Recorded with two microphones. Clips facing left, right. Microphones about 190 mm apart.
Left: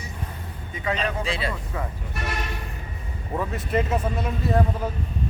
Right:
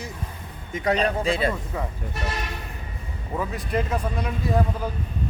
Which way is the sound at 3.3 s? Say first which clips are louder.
Left 1 dB; centre (ahead or behind).